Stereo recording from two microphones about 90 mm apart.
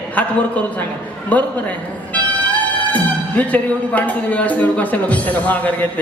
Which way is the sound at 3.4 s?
15° left (ahead or behind).